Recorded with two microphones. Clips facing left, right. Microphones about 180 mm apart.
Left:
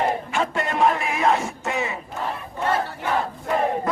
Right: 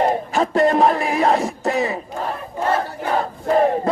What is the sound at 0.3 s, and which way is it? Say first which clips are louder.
Speech: right 8 dB; 35° right (ahead or behind).